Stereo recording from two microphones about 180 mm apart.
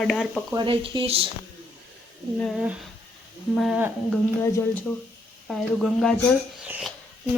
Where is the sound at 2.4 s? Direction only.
Centre (ahead or behind).